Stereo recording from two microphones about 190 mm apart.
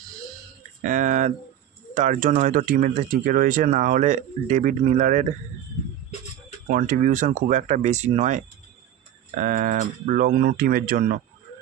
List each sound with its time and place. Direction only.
0.8 s speech: 40° right (ahead or behind)
6.7 s speech: 45° right (ahead or behind)